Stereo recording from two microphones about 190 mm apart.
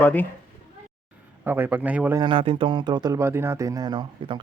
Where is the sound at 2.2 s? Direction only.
25° right (ahead or behind).